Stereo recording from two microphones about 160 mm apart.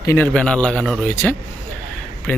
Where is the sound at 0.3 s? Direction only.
5° left (ahead or behind).